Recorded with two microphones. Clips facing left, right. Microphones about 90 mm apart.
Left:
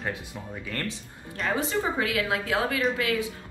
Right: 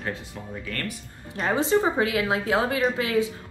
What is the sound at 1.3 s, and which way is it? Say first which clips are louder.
Speech: right 5 dB; 35° right (ahead or behind).